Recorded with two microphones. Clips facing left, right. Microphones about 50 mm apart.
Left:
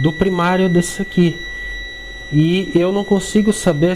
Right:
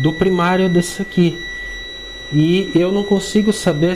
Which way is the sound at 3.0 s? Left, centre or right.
Left.